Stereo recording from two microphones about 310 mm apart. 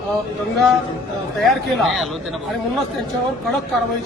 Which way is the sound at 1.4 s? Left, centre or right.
Centre.